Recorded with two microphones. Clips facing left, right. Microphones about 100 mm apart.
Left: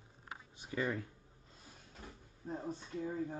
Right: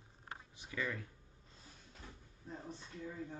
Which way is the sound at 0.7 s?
35° left (ahead or behind).